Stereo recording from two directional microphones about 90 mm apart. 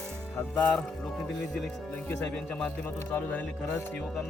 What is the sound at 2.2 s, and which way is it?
Speech, 10° left (ahead or behind).